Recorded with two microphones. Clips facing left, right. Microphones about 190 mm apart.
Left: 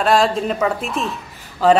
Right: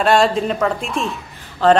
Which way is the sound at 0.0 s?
Centre (ahead or behind).